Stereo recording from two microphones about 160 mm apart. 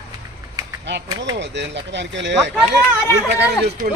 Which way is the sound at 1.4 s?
90° right.